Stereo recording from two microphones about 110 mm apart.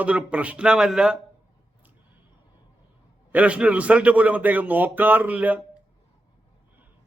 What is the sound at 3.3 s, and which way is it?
A man's voice, 10° right (ahead or behind).